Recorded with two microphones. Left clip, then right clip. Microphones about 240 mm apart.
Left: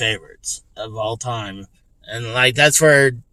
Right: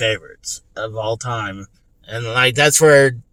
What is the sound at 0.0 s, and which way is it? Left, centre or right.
Speech, centre.